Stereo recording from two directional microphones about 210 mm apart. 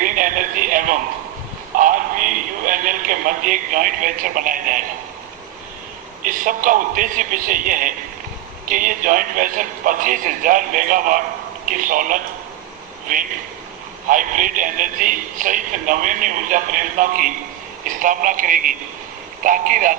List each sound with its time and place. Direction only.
0.0 s a sound: 40° right (ahead or behind)
1.8 s radio: 40° right (ahead or behind)
6.2 s speech: 40° right (ahead or behind)
14.1 s speech: 40° right (ahead or behind)